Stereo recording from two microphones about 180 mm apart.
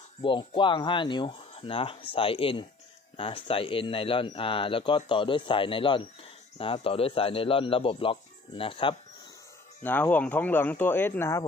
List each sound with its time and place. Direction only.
0.2 s speech: 30° left (ahead or behind)
9.8 s speech: 10° left (ahead or behind)